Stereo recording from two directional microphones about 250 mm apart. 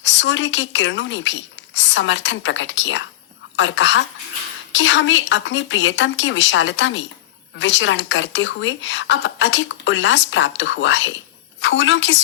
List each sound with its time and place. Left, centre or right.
0.0 s speech: left